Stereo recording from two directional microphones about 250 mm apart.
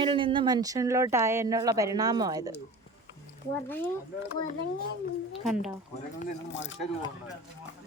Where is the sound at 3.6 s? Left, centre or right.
Centre.